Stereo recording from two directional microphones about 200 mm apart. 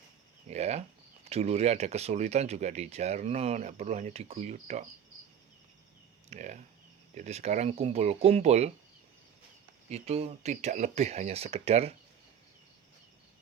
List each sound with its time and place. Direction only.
0.4 s speech: 35° right (ahead or behind)
6.3 s speech: 35° right (ahead or behind)
9.9 s speech: 30° right (ahead or behind)